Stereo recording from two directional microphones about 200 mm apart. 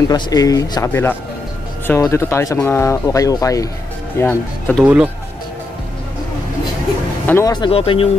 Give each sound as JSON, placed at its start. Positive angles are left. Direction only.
{"t": 0.1, "sound": "speech", "side_deg": 20}
{"t": 4.8, "sound": "speech", "side_deg": -10}
{"t": 7.2, "sound": "speech", "side_deg": 15}